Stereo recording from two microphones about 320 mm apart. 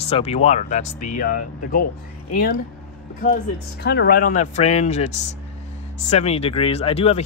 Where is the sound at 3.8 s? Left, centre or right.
Left.